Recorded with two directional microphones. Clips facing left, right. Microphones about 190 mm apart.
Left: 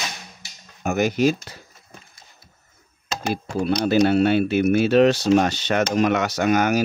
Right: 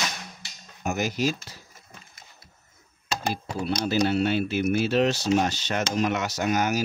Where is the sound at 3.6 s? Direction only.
55° left (ahead or behind).